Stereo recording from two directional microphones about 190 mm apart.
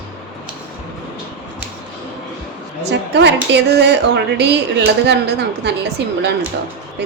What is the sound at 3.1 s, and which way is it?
Speech, 65° right (ahead or behind).